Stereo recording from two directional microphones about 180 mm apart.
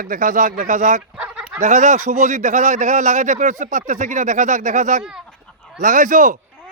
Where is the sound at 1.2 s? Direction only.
5° right (ahead or behind).